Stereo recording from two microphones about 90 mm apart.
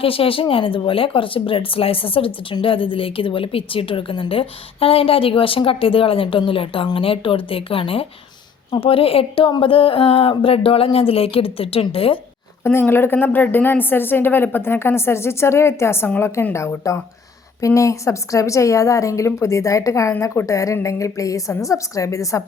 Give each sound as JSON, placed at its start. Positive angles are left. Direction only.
{"t": 0.0, "sound": "speech", "side_deg": 90}
{"t": 9.5, "sound": "speech", "side_deg": 80}
{"t": 12.6, "sound": "a woman's voice", "side_deg": 25}